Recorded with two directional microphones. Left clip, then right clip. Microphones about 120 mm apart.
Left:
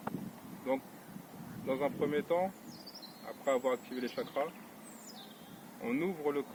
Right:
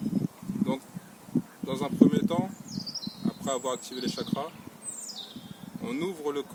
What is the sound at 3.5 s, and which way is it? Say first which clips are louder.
Speech: even; 75° right (ahead or behind).